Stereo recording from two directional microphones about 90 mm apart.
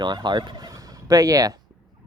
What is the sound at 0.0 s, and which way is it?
Speech, 55° right (ahead or behind).